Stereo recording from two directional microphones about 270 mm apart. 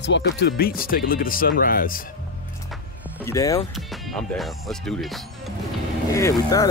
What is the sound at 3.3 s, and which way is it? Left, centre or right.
Speech, centre.